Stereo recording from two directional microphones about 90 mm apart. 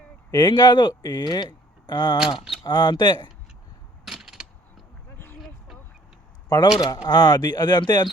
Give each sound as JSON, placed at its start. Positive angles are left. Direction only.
{"t": 0.3, "sound": "speech", "side_deg": 50}
{"t": 2.1, "sound": "speech", "side_deg": -5}
{"t": 2.6, "sound": "speech", "side_deg": 55}
{"t": 4.0, "sound": "a sound", "side_deg": -5}
{"t": 5.1, "sound": "a sound", "side_deg": 25}
{"t": 6.7, "sound": "speech", "side_deg": 50}